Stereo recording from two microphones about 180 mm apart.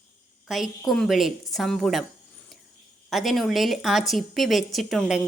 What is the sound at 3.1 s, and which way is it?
Speech, centre (ahead or behind).